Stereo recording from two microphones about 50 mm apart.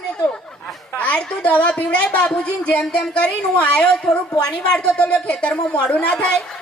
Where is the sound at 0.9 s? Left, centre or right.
Left.